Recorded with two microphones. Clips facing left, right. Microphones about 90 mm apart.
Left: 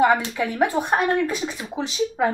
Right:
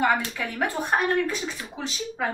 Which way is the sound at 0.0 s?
15° left (ahead or behind).